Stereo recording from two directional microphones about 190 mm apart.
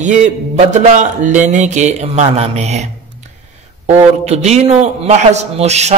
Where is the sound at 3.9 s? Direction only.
35° right (ahead or behind).